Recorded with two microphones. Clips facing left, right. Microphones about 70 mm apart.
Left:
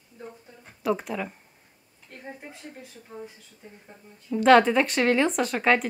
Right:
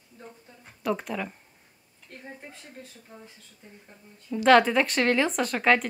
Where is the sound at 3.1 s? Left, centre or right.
Centre.